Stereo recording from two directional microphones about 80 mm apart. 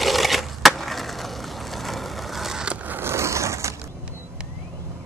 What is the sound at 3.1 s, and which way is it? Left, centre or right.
Vehicle, right.